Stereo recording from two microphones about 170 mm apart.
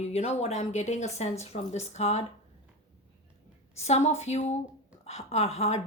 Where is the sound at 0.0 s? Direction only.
40° left (ahead or behind).